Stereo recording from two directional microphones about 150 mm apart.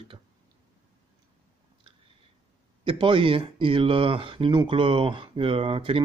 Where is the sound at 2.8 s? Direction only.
35° right (ahead or behind).